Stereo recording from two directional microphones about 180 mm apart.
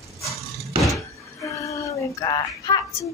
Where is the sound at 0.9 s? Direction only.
15° left (ahead or behind).